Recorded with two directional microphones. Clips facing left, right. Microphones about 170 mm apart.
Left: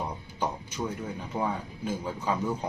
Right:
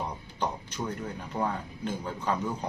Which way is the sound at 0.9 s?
10° left (ahead or behind).